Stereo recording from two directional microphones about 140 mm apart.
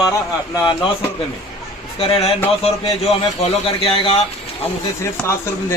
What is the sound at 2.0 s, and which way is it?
Speech, 40° left (ahead or behind).